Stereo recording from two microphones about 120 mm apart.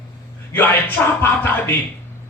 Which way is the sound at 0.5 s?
15° left (ahead or behind).